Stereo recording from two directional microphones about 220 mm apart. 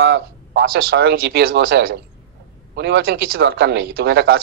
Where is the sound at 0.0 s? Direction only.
50° right (ahead or behind).